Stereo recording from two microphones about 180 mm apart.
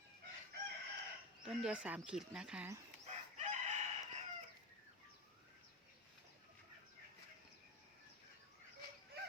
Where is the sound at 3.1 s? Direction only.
40° right (ahead or behind).